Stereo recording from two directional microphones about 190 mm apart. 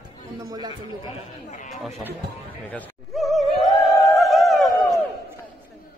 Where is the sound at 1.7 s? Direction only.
Centre (ahead or behind).